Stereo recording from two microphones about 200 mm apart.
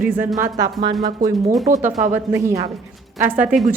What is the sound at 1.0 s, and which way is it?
Speech, 40° right (ahead or behind).